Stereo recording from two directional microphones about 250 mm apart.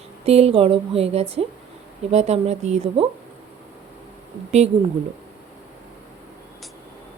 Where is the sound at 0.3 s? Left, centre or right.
Right.